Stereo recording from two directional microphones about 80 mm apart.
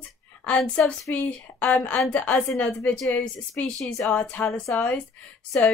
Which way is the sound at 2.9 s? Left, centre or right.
Centre.